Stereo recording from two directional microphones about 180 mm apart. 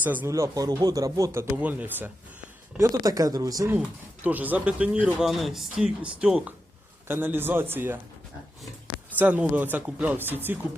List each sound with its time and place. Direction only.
0.0 s speech: 10° right (ahead or behind)
9.1 s speech: 10° right (ahead or behind)